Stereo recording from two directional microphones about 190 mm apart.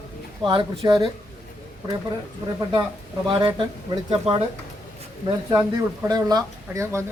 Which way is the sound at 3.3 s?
25° right (ahead or behind).